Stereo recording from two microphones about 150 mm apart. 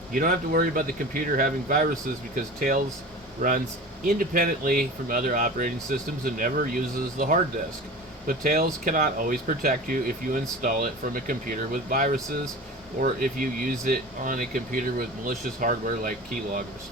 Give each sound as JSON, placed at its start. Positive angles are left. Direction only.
{"t": 0.1, "sound": "speech", "side_deg": -65}